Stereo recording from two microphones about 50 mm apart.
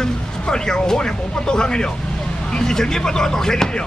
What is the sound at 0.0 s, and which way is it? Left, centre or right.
Speech, centre.